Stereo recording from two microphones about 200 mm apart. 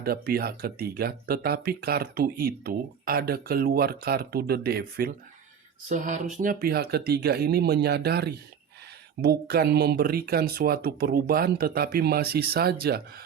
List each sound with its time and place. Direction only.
0.0 s speech: 50° right (ahead or behind)
5.9 s speech: 40° right (ahead or behind)